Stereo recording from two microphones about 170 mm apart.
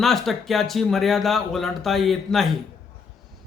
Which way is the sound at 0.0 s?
Centre (ahead or behind).